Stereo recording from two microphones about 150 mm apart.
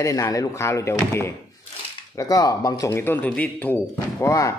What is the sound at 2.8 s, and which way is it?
Speech, 15° left (ahead or behind).